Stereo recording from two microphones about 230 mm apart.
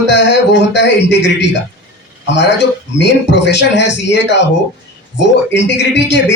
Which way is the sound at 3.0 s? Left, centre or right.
Left.